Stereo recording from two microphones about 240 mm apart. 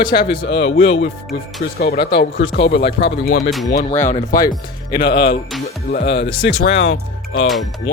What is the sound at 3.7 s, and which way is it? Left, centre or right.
Speech, left.